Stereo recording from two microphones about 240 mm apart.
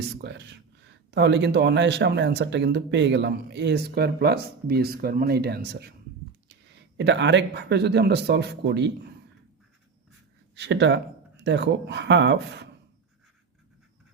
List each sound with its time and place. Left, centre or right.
0.2 s speech: right
6.9 s speech: right
10.5 s speech: right